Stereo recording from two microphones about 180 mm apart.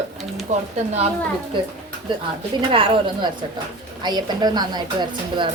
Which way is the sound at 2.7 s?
30° right (ahead or behind).